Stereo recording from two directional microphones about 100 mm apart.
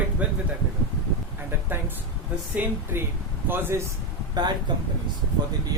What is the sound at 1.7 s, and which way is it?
A man's voice, 20° right (ahead or behind).